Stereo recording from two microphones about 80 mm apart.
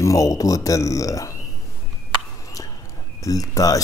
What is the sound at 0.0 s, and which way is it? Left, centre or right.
Speech, left.